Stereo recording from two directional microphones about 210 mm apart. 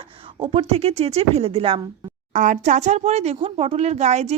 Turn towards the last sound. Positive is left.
turn(degrees=-30)  # may be behind; listen again after turning